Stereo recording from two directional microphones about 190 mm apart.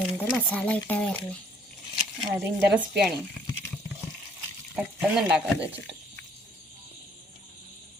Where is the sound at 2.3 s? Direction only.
10° right (ahead or behind).